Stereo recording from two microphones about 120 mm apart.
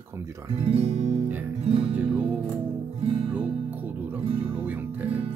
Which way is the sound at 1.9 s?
15° right (ahead or behind).